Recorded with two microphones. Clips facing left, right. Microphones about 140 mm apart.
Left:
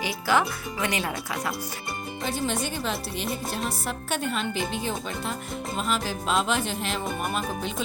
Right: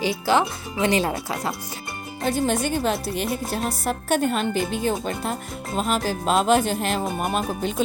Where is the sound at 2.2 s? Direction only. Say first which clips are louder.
Right 6 dB; 50° right (ahead or behind).